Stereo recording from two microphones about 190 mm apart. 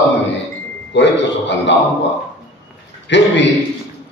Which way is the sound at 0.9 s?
70° left (ahead or behind).